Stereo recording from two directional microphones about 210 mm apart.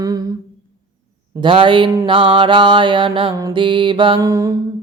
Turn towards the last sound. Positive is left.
turn(degrees=-15)  # may be behind; listen again after turning